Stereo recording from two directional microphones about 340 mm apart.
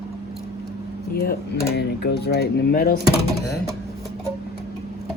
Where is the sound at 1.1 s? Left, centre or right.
Left.